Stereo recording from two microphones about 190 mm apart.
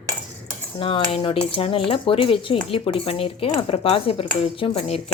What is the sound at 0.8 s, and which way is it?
Speech, 25° left (ahead or behind).